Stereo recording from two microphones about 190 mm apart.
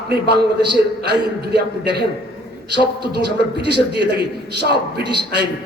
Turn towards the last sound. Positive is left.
turn(degrees=-60)  # may be behind; listen again after turning